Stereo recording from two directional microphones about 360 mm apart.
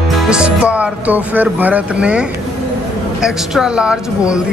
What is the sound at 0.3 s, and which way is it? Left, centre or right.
Speech, centre.